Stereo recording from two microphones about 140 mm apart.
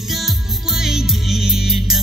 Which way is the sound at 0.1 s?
Centre (ahead or behind).